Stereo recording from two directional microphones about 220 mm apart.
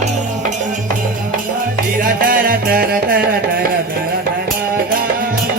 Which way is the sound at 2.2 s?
40° right (ahead or behind).